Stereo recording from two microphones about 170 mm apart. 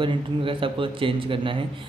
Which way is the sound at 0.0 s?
30° right (ahead or behind).